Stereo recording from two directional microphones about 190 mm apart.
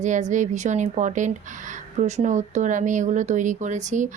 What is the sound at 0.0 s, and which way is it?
A woman's voice, 40° right (ahead or behind).